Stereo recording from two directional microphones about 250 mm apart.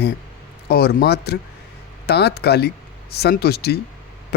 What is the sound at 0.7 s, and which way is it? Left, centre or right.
Speech, left.